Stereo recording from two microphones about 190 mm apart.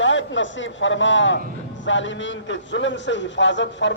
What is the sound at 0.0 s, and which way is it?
A man's voice, 75° left (ahead or behind).